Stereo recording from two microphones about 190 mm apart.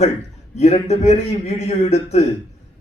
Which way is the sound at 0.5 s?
35° left (ahead or behind).